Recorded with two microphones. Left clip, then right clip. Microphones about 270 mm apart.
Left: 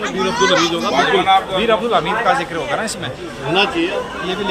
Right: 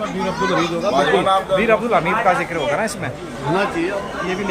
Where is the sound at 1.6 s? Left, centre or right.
Centre.